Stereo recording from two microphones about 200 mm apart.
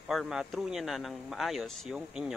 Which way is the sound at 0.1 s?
Centre (ahead or behind).